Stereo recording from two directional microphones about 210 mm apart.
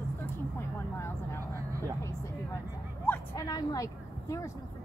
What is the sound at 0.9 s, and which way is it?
Vehicle, 10° left (ahead or behind).